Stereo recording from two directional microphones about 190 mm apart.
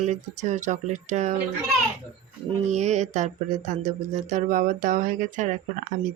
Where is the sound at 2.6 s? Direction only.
35° right (ahead or behind).